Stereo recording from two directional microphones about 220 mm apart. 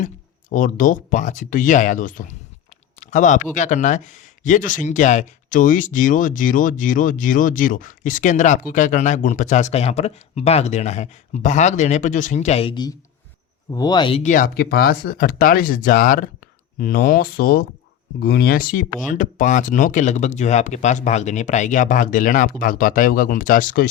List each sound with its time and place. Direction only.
0.5 s speech: 35° left (ahead or behind); by 14.2 s 20° left (ahead or behind)
14.2 s speech: 35° left (ahead or behind)